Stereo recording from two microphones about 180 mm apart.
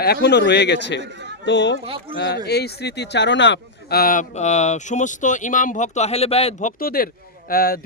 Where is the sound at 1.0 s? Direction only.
75° right (ahead or behind).